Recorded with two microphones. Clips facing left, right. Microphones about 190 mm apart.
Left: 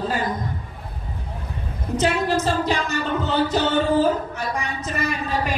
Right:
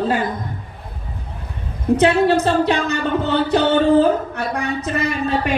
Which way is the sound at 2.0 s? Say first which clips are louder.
Right 5 dB; 65° right (ahead or behind).